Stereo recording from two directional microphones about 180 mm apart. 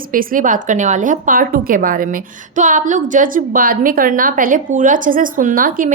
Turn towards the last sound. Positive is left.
turn(degrees=-50)  # may be behind; listen again after turning